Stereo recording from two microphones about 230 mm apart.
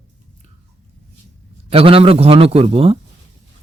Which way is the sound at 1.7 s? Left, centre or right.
Right.